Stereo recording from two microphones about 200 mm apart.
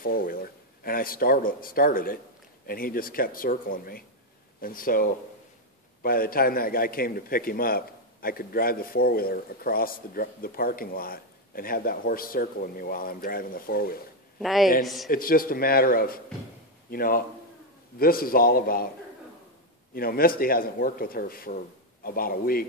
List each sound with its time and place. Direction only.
0.0 s a man's voice: 45° left (ahead or behind)
14.4 s speech: centre (ahead or behind)
15.0 s a man's voice: 45° left (ahead or behind)
19.9 s a man's voice: 45° left (ahead or behind)